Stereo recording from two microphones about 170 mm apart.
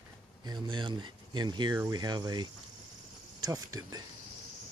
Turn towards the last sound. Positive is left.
turn(degrees=-20)  # may be behind; listen again after turning